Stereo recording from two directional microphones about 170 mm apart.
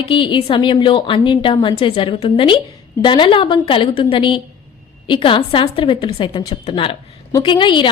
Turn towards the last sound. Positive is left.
turn(degrees=30)  # may be behind; listen again after turning